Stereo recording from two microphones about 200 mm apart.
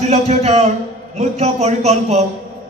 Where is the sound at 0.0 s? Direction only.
35° right (ahead or behind).